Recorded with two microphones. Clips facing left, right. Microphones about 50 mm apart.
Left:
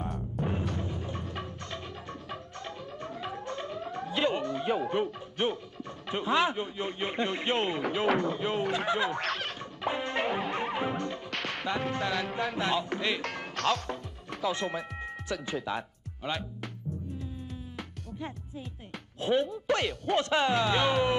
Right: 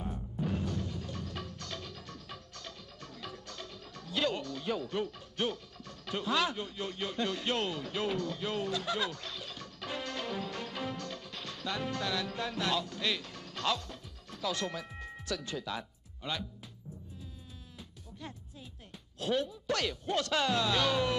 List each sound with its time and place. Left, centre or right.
0.0 s music: left
0.7 s music: left
9.2 s a sound: left
9.6 s music: left
11.2 s music: left
11.9 s music: left
13.7 s music: left
14.4 s speech: left
19.1 s speech: left
19.7 s speech: left
20.2 s music: left